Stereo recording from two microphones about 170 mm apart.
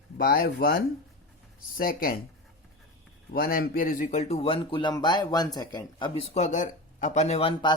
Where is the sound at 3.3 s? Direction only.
60° left (ahead or behind).